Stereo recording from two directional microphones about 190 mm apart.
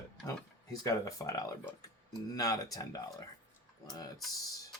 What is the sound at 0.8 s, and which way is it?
Speech, 15° left (ahead or behind).